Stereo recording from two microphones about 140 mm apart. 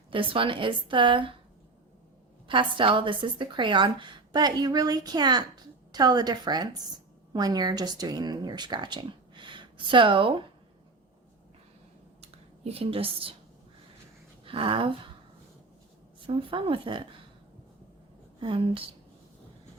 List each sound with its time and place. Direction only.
0.1 s speech: 40° right (ahead or behind)
2.5 s a woman's voice: 35° right (ahead or behind)
12.2 s a sound: 45° right (ahead or behind)
14.4 s a sound: 40° right (ahead or behind)
16.2 s speech: 40° right (ahead or behind)
18.3 s a woman's voice: 40° right (ahead or behind)